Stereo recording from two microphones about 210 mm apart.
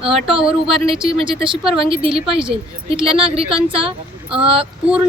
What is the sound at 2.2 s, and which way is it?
Speech, 5° right (ahead or behind).